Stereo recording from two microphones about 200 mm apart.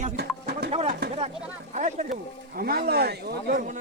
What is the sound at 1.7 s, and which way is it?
Speech, 35° right (ahead or behind).